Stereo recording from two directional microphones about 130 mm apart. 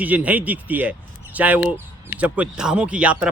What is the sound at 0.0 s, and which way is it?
Speech, 10° right (ahead or behind).